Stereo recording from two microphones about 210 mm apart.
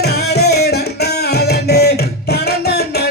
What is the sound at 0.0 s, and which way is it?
Music, 50° left (ahead or behind).